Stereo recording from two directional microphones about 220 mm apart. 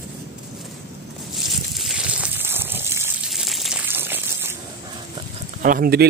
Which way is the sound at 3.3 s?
Centre (ahead or behind).